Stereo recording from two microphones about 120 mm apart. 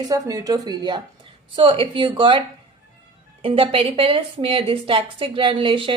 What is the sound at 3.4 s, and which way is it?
A woman's voice, 50° right (ahead or behind).